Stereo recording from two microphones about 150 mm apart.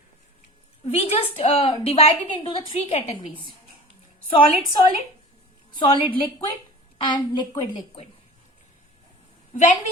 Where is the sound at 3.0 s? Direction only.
50° left (ahead or behind).